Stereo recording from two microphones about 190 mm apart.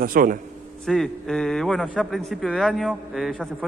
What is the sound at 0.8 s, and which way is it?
Speech, centre (ahead or behind).